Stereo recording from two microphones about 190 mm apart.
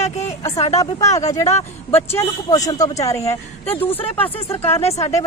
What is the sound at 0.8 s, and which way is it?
Speech, 15° left (ahead or behind).